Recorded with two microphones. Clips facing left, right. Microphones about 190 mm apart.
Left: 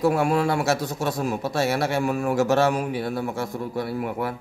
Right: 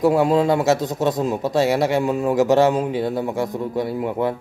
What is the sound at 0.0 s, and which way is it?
Speech, 20° right (ahead or behind).